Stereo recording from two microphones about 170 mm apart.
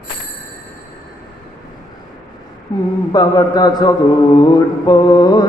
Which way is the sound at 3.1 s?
25° left (ahead or behind).